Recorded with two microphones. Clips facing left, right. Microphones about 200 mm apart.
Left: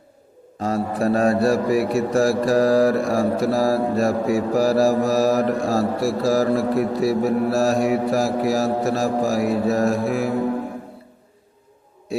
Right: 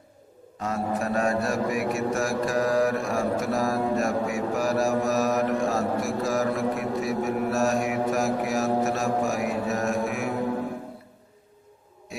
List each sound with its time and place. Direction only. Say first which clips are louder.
0.6 s a man's voice: left 6 dB; 35° left (ahead or behind)